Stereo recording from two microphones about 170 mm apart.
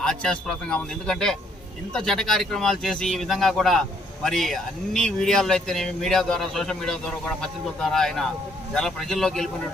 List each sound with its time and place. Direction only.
0.0 s speech: 5° left (ahead or behind)